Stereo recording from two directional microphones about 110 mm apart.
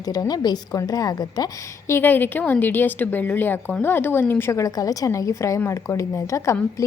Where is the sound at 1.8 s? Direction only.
20° left (ahead or behind).